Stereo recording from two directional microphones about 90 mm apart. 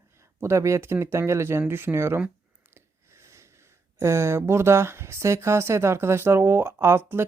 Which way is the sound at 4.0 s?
30° right (ahead or behind).